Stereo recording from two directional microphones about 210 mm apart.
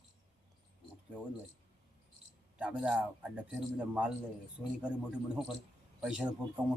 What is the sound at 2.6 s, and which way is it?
Speech, 5° right (ahead or behind).